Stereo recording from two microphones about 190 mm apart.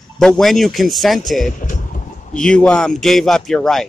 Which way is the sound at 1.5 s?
45° left (ahead or behind).